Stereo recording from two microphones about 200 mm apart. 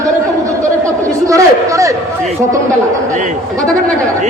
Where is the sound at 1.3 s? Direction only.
15° right (ahead or behind).